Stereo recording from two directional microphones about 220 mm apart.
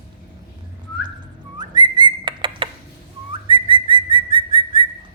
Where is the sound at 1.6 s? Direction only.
20° right (ahead or behind).